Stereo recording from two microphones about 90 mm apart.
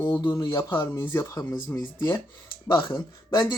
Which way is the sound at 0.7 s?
25° left (ahead or behind).